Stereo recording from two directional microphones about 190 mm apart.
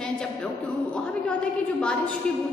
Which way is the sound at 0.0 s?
5° left (ahead or behind).